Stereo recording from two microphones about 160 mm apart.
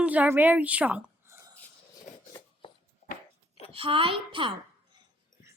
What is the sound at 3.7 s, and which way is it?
Speech, 35° right (ahead or behind).